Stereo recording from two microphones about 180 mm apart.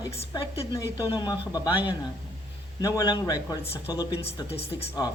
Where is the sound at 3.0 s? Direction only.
20° left (ahead or behind).